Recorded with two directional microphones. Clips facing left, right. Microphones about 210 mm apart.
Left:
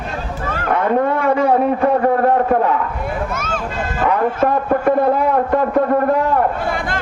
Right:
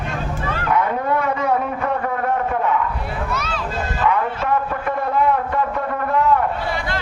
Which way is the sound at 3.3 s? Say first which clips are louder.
Left 2 dB; 50° left (ahead or behind).